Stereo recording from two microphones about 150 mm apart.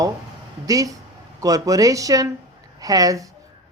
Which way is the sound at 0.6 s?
25° right (ahead or behind).